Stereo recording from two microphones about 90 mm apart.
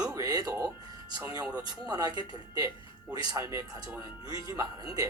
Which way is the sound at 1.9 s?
45° right (ahead or behind).